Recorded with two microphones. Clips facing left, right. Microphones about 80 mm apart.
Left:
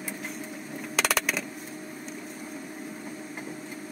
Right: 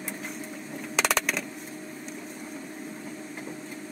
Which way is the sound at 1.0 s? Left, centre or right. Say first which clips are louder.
Right 1 dB; centre.